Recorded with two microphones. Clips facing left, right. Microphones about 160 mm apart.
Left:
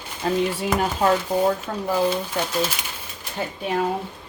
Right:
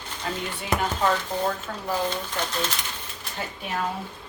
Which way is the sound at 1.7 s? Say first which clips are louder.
Left 6 dB; 35° left (ahead or behind).